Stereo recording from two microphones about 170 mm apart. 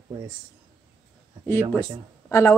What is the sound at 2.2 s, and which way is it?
Speech, 15° left (ahead or behind).